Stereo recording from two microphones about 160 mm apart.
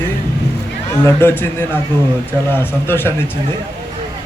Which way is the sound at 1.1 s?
15° left (ahead or behind).